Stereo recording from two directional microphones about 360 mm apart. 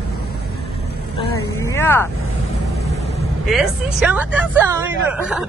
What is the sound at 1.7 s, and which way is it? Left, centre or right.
Vehicle, centre.